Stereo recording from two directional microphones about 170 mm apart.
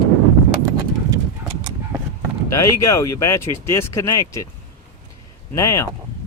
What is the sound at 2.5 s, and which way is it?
Speech, 20° left (ahead or behind).